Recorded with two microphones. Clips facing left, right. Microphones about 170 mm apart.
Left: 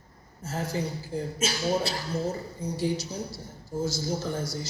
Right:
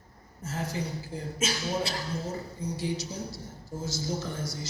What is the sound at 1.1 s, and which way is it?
Speech, 30° left (ahead or behind).